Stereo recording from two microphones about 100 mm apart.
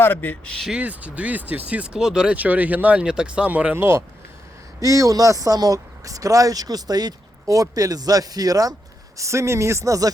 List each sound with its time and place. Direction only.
0.0 s a man's voice: 20° left (ahead or behind)
0.7 s speech: 15° right (ahead or behind); by 10.1 s 35° right (ahead or behind)